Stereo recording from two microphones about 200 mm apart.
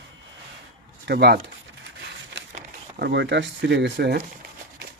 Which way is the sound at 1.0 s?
55° right (ahead or behind).